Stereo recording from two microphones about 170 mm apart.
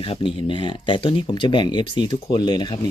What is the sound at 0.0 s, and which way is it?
Speech, 30° left (ahead or behind).